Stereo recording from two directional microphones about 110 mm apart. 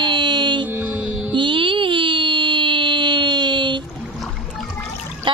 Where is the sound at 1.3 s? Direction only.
45° right (ahead or behind).